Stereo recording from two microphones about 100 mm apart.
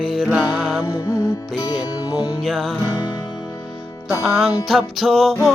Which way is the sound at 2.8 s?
45° left (ahead or behind).